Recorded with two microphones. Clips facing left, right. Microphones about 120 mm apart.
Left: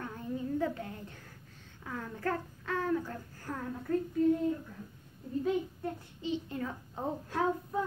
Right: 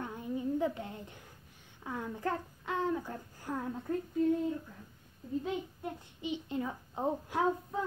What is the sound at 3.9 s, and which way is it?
Child singing, 20° right (ahead or behind).